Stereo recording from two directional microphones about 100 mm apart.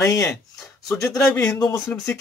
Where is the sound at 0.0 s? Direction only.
30° left (ahead or behind).